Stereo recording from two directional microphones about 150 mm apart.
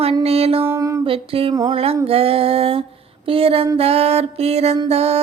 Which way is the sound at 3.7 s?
40° right (ahead or behind).